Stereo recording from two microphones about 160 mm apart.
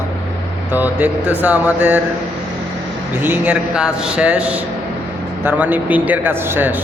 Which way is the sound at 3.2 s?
10° right (ahead or behind).